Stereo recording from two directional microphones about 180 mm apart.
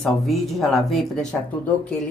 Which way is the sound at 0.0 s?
Centre (ahead or behind).